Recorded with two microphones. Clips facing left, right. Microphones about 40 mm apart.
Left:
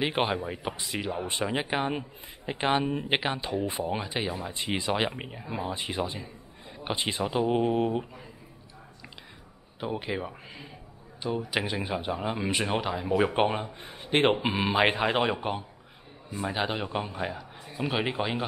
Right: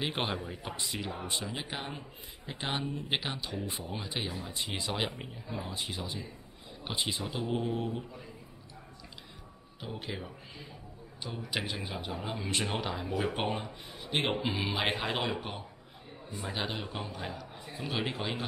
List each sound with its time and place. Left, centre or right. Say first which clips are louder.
0.0 s speech: left 6 dB; centre
1.2 s speech: left 7 dB; left
3.2 s speech: left 8 dB; left
4.0 s speech: left 5 dB; centre
4.3 s speech: left 6 dB; left
4.6 s speech: left 7 dB; centre
5.1 s speech: left 5 dB; left
7.6 s speech: left 8 dB; left
9.8 s speech: left 8 dB; left
13.2 s speech: left 7 dB; left
14.7 s speech: left 10 dB; centre
16.8 s speech: left 7 dB; left